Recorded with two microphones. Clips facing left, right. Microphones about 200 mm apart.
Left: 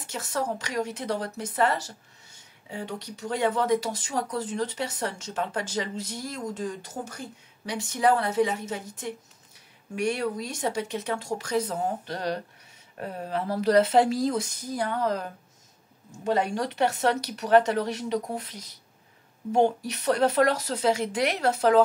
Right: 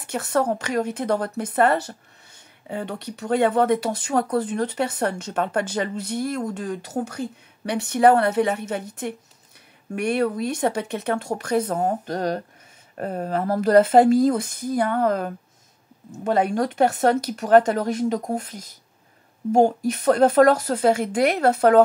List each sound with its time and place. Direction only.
0.0 s a woman's voice: 60° right (ahead or behind)